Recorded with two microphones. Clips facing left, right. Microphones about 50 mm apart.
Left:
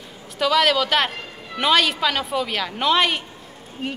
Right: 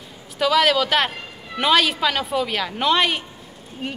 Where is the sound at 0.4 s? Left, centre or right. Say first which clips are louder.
Right 1 dB; centre.